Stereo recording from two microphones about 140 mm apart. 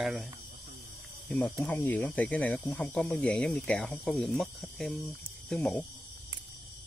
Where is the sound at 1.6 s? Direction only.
10° left (ahead or behind).